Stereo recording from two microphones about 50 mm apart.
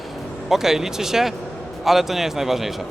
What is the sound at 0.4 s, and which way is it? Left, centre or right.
A man's voice, centre.